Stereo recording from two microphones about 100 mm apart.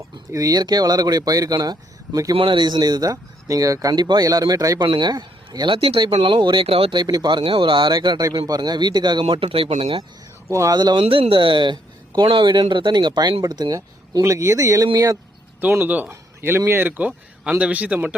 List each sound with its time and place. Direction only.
0.3 s speech: 35° right (ahead or behind)
2.3 s speech: 60° right (ahead or behind); by 4.8 s 35° right (ahead or behind)
4.8 s speech: 50° right (ahead or behind); by 6.1 s 65° right (ahead or behind)
6.1 s speech: 50° right (ahead or behind)
6.7 s speech: 75° right (ahead or behind)
6.9 s speech: 40° right (ahead or behind)
7.9 s speech: 40° right (ahead or behind)
9.2 s speech: 65° right (ahead or behind)
10.5 s speech: 30° right (ahead or behind)
10.8 s speech: 45° right (ahead or behind)
11.0 s speech: 65° right (ahead or behind); by 15.2 s 40° right (ahead or behind)
15.6 s a man's voice: 20° right (ahead or behind)